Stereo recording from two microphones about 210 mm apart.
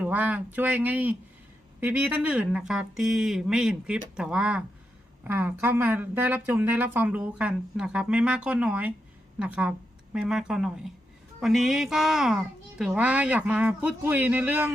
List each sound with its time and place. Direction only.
0.0 s speech: 5° right (ahead or behind)